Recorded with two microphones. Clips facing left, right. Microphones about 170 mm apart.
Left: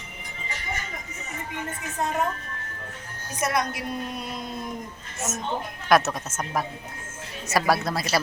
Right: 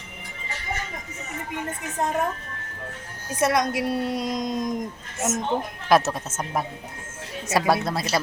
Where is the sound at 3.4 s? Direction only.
90° right.